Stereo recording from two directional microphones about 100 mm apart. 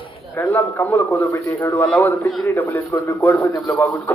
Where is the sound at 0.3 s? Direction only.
20° left (ahead or behind).